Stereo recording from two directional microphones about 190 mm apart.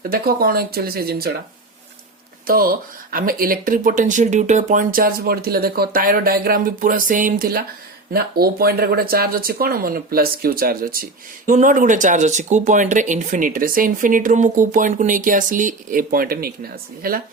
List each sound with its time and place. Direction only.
0.1 s speech: 50° right (ahead or behind)
2.5 s speech: 50° right (ahead or behind)